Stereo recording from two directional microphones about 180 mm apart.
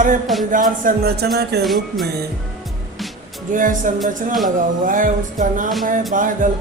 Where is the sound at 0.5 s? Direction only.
50° right (ahead or behind).